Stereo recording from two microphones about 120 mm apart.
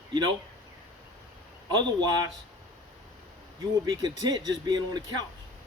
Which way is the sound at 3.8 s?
35° right (ahead or behind).